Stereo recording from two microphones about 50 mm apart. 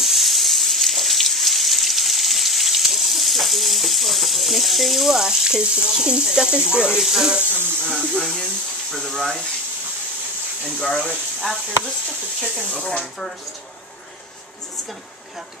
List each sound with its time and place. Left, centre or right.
0.0 s water tap: centre
7.0 s speech: centre
7.9 s speech: centre
10.6 s speech: left
11.0 s speech: centre